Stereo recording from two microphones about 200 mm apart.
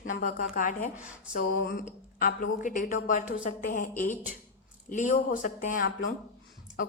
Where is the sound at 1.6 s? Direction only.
55° left (ahead or behind).